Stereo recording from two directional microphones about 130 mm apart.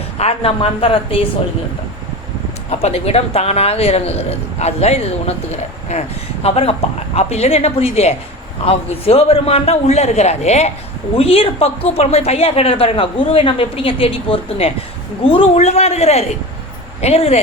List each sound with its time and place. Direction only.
0.2 s speech: 50° left (ahead or behind)
2.6 s speech: 55° left (ahead or behind)